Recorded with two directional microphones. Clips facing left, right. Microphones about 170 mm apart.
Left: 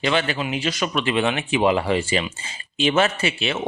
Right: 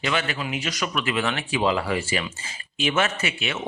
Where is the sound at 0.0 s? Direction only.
30° left (ahead or behind).